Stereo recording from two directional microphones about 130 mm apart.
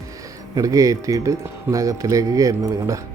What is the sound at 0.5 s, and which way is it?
Speech, 25° right (ahead or behind).